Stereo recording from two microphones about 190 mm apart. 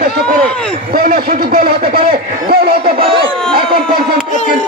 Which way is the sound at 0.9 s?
50° right (ahead or behind).